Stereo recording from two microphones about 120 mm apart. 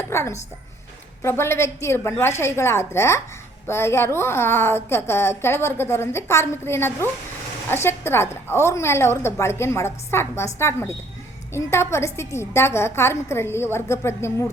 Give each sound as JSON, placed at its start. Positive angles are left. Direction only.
{"t": 0.1, "sound": "music", "side_deg": 25}
{"t": 1.2, "sound": "a woman's voice", "side_deg": 20}